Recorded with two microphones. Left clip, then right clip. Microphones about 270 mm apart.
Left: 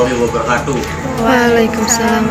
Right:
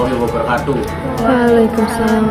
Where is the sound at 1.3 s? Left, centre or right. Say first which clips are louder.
Even; centre.